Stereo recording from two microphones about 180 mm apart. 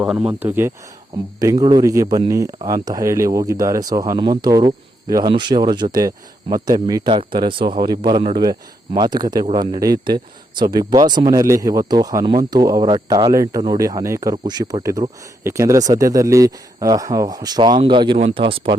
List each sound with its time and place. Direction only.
0.0 s speech: 5° right (ahead or behind); by 18.8 s 30° right (ahead or behind)